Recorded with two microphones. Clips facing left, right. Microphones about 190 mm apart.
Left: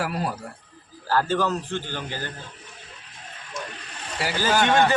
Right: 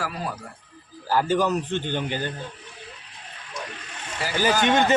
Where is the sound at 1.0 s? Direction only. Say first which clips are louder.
Right 1 dB; 15° right (ahead or behind).